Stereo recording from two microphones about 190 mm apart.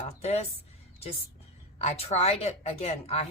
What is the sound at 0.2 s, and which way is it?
Speech, 35° left (ahead or behind).